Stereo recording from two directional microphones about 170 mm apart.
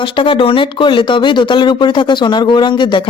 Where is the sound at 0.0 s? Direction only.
30° left (ahead or behind).